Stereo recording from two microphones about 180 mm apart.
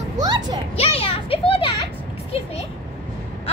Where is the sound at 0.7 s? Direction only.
30° left (ahead or behind).